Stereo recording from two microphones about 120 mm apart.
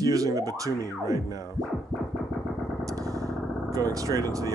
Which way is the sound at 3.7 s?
30° right (ahead or behind).